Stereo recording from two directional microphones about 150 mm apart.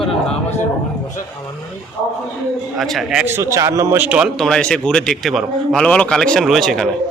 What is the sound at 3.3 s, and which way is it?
Speech, 20° right (ahead or behind).